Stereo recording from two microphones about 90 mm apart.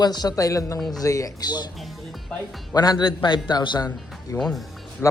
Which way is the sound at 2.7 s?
50° left (ahead or behind).